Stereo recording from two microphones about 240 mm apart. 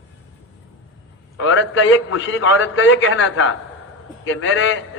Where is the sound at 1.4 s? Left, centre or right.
Left.